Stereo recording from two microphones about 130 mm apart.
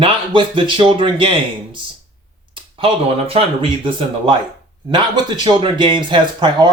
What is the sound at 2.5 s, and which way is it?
Speech, 45° right (ahead or behind).